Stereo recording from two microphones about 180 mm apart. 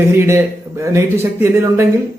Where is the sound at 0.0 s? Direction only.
15° right (ahead or behind).